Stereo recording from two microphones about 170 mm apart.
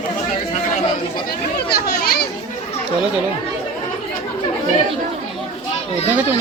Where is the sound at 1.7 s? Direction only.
65° left (ahead or behind).